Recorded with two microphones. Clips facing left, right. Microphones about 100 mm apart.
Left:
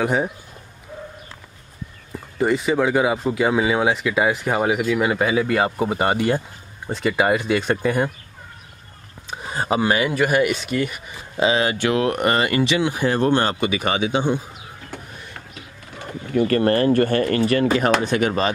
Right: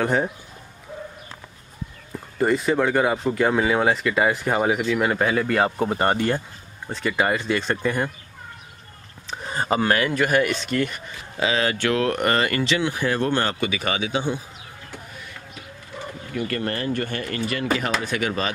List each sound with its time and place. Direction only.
0.0 s speech: 5° left (ahead or behind)
2.1 s speech: centre (ahead or behind)
9.3 s speech: 5° left (ahead or behind)
11.3 s a man's voice: 20° left (ahead or behind)
16.3 s speech: 45° left (ahead or behind)
18.0 s a man's voice: 30° left (ahead or behind)